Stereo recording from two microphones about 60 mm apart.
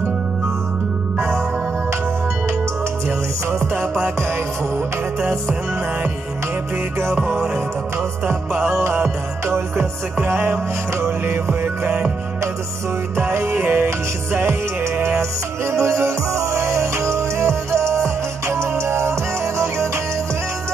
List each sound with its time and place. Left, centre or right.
3.5 s music: right
8.6 s music: right
13.1 s music: right